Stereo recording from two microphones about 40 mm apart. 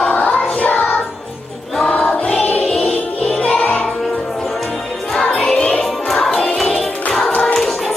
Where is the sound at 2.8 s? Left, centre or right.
Centre.